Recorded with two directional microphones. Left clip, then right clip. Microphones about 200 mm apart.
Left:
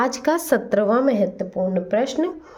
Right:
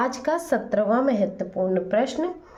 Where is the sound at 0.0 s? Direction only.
40° left (ahead or behind).